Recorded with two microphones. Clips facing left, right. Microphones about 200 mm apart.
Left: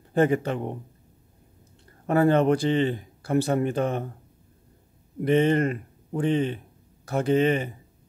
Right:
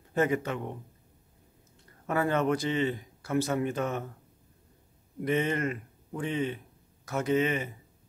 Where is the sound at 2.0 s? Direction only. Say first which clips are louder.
Left 7 dB; 30° left (ahead or behind).